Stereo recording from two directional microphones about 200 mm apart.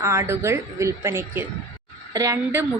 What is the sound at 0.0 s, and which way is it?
A woman's voice, 15° right (ahead or behind).